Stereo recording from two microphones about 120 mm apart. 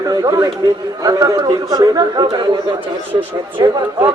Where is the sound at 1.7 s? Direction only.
35° right (ahead or behind).